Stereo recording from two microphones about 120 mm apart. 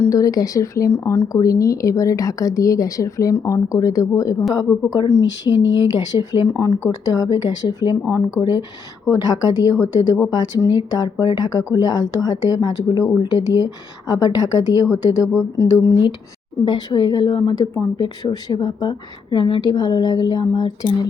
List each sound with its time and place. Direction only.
0.1 s a woman's voice: 30° left (ahead or behind)
9.2 s a woman's voice: 35° left (ahead or behind)
16.6 s a woman's voice: 35° left (ahead or behind)